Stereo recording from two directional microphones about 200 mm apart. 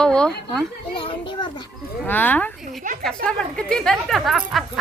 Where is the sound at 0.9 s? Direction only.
25° left (ahead or behind).